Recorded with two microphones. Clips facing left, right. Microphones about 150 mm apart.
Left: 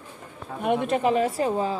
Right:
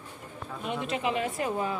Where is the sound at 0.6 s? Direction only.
55° left (ahead or behind); by 1.8 s 30° left (ahead or behind).